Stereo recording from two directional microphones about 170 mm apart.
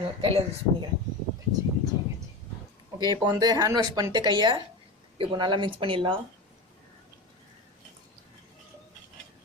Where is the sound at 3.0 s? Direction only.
25° right (ahead or behind).